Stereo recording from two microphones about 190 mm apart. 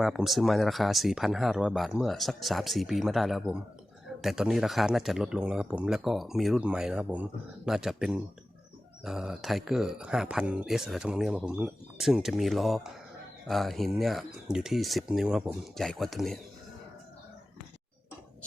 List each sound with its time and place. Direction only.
0.0 s speech: centre (ahead or behind)